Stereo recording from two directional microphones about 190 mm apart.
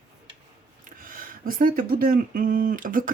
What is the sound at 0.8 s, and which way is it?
Speech, 50° right (ahead or behind).